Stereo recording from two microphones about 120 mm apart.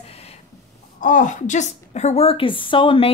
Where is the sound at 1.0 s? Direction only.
90° left.